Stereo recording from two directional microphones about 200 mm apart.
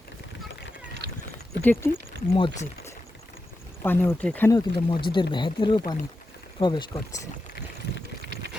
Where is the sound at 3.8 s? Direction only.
10° left (ahead or behind).